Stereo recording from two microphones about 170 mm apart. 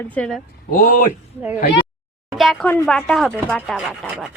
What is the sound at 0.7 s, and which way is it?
Speech, 55° left (ahead or behind).